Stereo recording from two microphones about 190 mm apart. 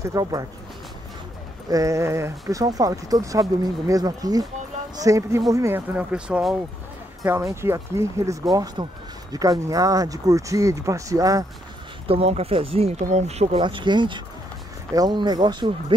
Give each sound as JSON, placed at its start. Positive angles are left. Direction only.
{"t": 0.0, "sound": "speech", "side_deg": -20}
{"t": 1.7, "sound": "speech", "side_deg": -15}
{"t": 12.1, "sound": "speech", "side_deg": -30}